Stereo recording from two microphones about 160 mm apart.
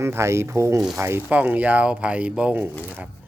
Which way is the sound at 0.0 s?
15° right (ahead or behind).